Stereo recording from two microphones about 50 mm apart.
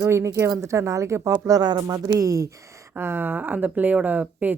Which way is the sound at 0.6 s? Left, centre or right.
Right.